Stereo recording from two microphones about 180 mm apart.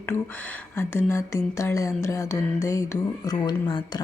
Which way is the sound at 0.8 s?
15° left (ahead or behind).